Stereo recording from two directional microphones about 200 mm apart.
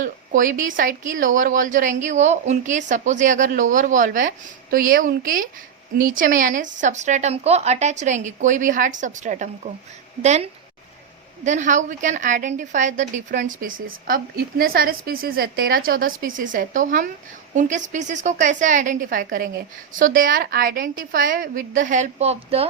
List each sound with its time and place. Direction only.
0.0 s a woman's voice: 40° right (ahead or behind)